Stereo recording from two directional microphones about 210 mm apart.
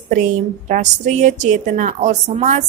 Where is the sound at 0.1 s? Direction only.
35° right (ahead or behind).